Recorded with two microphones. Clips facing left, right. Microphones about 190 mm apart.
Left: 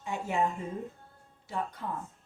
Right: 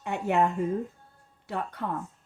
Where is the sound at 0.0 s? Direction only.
65° right (ahead or behind).